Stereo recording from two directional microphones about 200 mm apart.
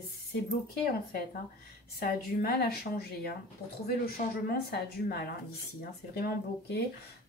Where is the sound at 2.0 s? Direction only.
50° left (ahead or behind).